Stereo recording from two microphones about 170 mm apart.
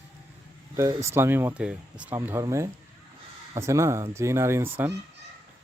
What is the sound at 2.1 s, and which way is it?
Speech, 15° right (ahead or behind).